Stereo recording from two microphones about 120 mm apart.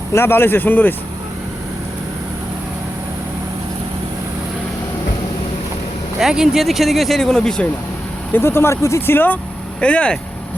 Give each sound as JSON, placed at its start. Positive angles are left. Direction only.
{"t": 0.1, "sound": "speech", "side_deg": 20}
{"t": 6.1, "sound": "speech", "side_deg": -5}
{"t": 8.3, "sound": "speech", "side_deg": 20}